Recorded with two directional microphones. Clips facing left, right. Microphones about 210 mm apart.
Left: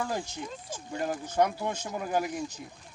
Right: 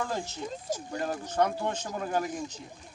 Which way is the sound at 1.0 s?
10° left (ahead or behind).